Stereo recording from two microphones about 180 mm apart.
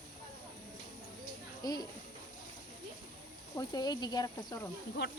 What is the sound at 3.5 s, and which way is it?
Speech, 20° left (ahead or behind).